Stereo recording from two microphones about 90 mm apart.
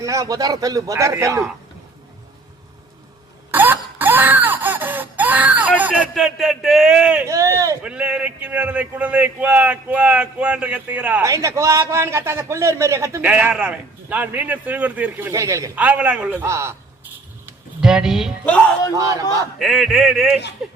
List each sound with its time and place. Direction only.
0.0 s a man's voice: 40° right (ahead or behind)
3.5 s a sound: 20° right (ahead or behind)
6.1 s speech: centre (ahead or behind)
7.3 s a sound: 35° right (ahead or behind)
7.8 s speech: 15° right (ahead or behind)
11.2 s a man's voice: 35° right (ahead or behind)
13.2 s speech: 15° right (ahead or behind)
15.3 s a man's voice: 35° right (ahead or behind)
15.7 s speech: 15° right (ahead or behind)
16.5 s a man's voice: 30° right (ahead or behind)
17.7 s speech: 5° right (ahead or behind)
18.4 s speech: 15° left (ahead or behind)
18.9 s a man's voice: 40° right (ahead or behind)
19.5 s speech: centre (ahead or behind)